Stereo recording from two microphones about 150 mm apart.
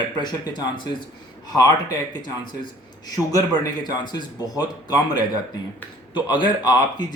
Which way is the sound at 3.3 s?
25° left (ahead or behind).